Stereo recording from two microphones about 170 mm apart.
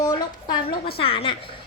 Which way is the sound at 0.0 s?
25° left (ahead or behind).